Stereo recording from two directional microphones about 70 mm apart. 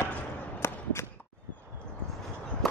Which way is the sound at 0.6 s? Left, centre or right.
Left.